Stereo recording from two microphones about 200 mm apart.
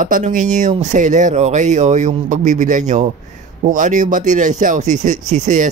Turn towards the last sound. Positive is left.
turn(degrees=-40)  # may be behind; listen again after turning